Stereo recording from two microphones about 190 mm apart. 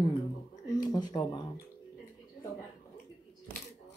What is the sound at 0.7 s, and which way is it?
Speech, 20° left (ahead or behind).